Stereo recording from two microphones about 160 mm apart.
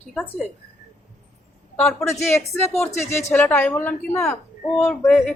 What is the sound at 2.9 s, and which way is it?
Speech, 45° left (ahead or behind).